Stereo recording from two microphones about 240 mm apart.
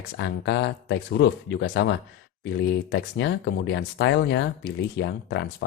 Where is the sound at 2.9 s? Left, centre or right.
Left.